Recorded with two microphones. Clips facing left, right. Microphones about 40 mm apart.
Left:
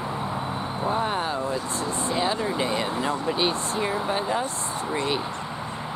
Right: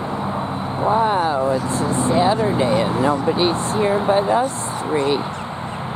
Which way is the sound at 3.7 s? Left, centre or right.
Right.